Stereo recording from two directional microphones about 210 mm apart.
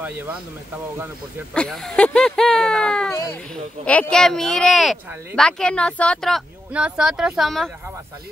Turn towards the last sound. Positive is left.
turn(degrees=0)  # may be behind; listen again after turning